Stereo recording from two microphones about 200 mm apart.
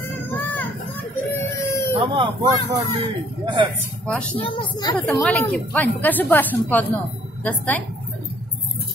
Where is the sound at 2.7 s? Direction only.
25° right (ahead or behind).